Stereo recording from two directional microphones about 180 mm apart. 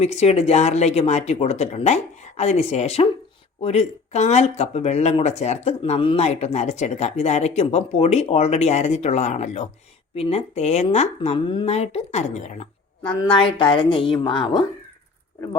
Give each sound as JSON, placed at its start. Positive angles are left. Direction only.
{"t": 0.0, "sound": "speech", "side_deg": 35}
{"t": 13.3, "sound": "a woman's voice", "side_deg": 25}